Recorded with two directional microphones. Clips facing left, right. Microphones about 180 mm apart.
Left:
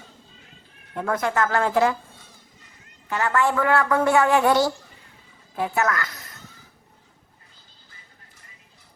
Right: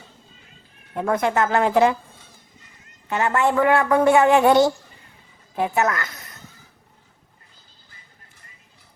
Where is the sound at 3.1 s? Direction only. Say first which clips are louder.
Right 2 dB; 20° right (ahead or behind).